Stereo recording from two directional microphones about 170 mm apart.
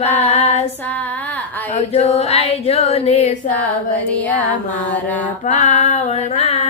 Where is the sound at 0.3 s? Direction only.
40° left (ahead or behind).